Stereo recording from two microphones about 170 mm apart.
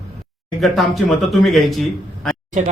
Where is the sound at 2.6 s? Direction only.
45° right (ahead or behind).